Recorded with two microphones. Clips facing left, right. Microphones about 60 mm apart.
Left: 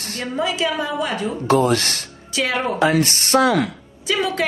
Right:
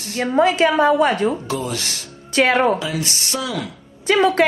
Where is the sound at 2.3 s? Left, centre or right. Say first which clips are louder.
Right 6 dB; right.